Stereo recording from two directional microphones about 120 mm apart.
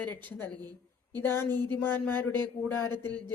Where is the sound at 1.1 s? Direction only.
20° left (ahead or behind).